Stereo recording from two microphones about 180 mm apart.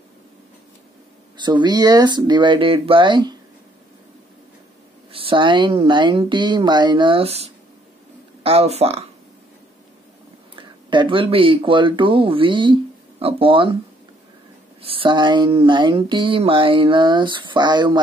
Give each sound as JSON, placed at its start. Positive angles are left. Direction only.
{"t": 1.3, "sound": "speech", "side_deg": -25}
{"t": 5.1, "sound": "speech", "side_deg": -30}
{"t": 10.6, "sound": "speech", "side_deg": -25}
{"t": 14.8, "sound": "speech", "side_deg": -30}